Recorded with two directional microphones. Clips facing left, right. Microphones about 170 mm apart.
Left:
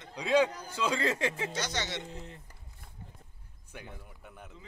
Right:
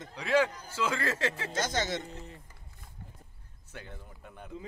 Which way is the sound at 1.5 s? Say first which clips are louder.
Right 4 dB; 50° right (ahead or behind).